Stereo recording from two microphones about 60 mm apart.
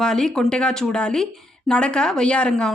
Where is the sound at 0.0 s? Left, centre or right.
Centre.